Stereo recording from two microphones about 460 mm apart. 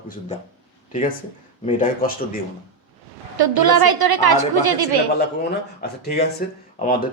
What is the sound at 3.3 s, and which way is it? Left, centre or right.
A woman's voice, right.